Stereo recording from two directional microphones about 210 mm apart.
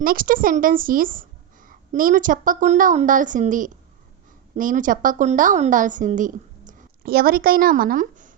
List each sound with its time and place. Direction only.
0.0 s a woman's voice: 45° right (ahead or behind)